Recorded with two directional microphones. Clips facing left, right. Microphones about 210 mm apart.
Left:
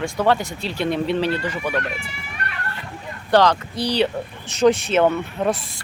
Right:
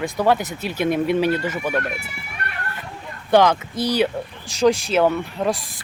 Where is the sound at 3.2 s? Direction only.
10° right (ahead or behind).